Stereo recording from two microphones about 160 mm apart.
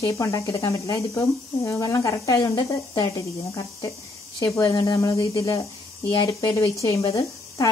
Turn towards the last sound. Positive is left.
turn(degrees=20)  # may be behind; listen again after turning